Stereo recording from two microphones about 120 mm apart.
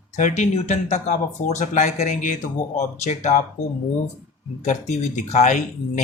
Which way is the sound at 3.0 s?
75° left (ahead or behind).